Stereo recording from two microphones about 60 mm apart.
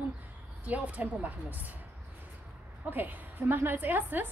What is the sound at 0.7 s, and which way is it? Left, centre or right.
A woman's voice, right.